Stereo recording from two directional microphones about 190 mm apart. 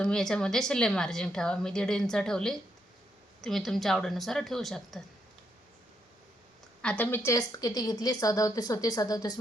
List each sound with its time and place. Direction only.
0.0 s a woman's voice: 5° left (ahead or behind)
6.8 s a woman's voice: 10° left (ahead or behind)